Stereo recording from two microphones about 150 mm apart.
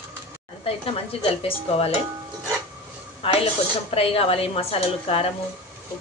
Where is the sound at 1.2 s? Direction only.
40° left (ahead or behind).